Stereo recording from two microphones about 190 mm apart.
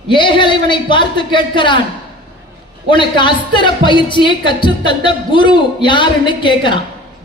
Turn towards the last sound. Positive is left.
turn(degrees=25)  # may be behind; listen again after turning